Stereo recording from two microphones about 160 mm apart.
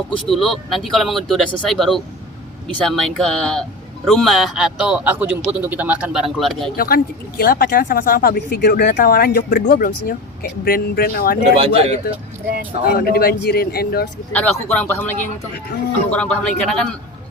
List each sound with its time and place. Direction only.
0.3 s speech: centre (ahead or behind)
6.7 s speech: 70° left (ahead or behind)
11.5 s speech: 40° right (ahead or behind)
12.8 s speech: 70° left (ahead or behind)
14.3 s speech: 10° left (ahead or behind)
16.1 s speech: 5° left (ahead or behind)